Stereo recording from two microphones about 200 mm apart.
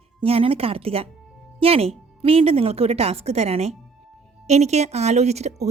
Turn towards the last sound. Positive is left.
turn(degrees=-35)  # may be behind; listen again after turning